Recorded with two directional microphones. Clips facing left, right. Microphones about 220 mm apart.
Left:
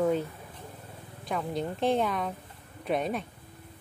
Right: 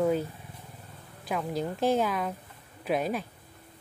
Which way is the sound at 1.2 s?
Centre (ahead or behind).